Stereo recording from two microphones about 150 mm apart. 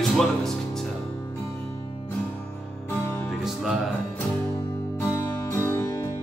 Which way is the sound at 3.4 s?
Centre (ahead or behind).